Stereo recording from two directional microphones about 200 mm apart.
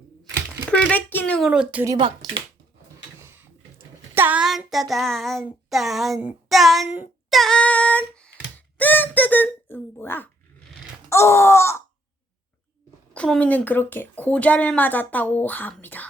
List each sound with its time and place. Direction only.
0.7 s speech: 5° left (ahead or behind)
1.5 s speech: 5° right (ahead or behind); by 2.4 s 25° right (ahead or behind)
3.2 s child singing: 10° right (ahead or behind)
5.7 s speech: centre (ahead or behind)
6.5 s child singing: centre (ahead or behind)
11.1 s a woman's voice: 15° left (ahead or behind)
13.1 s a woman's voice: 5° left (ahead or behind)